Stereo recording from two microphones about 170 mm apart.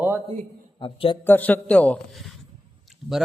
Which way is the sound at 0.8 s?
30° left (ahead or behind).